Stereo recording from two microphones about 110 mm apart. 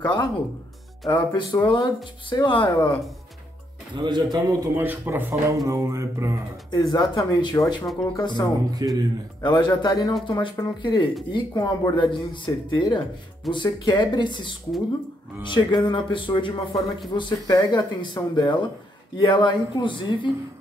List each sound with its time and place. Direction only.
0.0 s speech: 45° left (ahead or behind)
3.9 s a man's voice: 45° right (ahead or behind)
4.7 s a man's voice: 20° right (ahead or behind)
6.7 s speech: 40° left (ahead or behind)
8.6 s a man's voice: 35° right (ahead or behind)
9.4 s speech: 40° left (ahead or behind)